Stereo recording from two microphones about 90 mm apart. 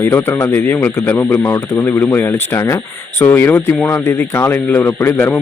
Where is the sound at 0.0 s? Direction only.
25° left (ahead or behind).